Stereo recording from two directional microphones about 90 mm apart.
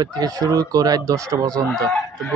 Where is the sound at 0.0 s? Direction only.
45° right (ahead or behind).